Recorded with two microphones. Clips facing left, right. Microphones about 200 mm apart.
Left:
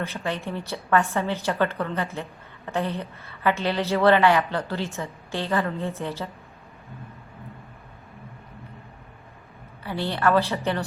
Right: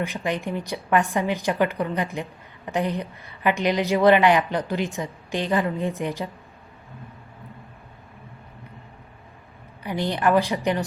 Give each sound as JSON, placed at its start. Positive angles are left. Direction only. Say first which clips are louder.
{"t": 0.0, "sound": "a woman's voice", "louder": "right 3 dB", "side_deg": -15}
{"t": 9.8, "sound": "a woman's voice", "louder": "right 1 dB", "side_deg": -15}